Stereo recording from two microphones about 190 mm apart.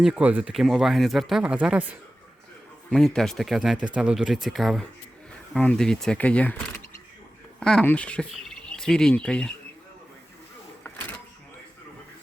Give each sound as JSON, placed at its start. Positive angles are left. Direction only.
{"t": 0.0, "sound": "speech", "side_deg": -5}
{"t": 2.9, "sound": "speech", "side_deg": 0}
{"t": 7.6, "sound": "speech", "side_deg": 5}
{"t": 10.8, "sound": "a sound", "side_deg": 10}